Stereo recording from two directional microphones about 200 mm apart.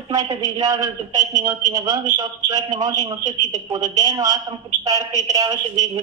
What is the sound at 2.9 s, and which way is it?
Speech, 35° right (ahead or behind).